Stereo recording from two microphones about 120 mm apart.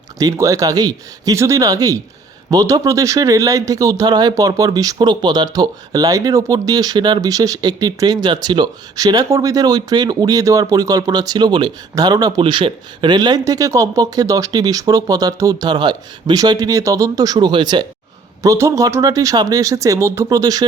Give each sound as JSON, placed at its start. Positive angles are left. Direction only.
{"t": 0.2, "sound": "speech", "side_deg": -30}
{"t": 12.4, "sound": "speech", "side_deg": -45}
{"t": 18.4, "sound": "speech", "side_deg": -25}